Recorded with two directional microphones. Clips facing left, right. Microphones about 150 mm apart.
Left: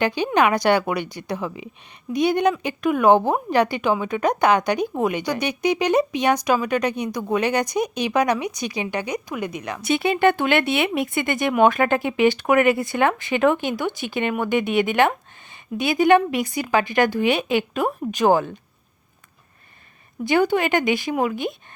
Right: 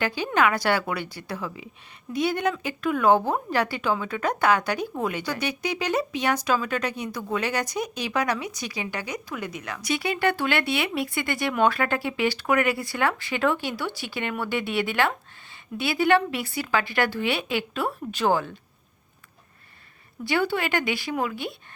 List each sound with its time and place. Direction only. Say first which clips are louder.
0.0 s speech: left 4 dB; 20° left (ahead or behind)
20.2 s speech: left 6 dB; 20° left (ahead or behind)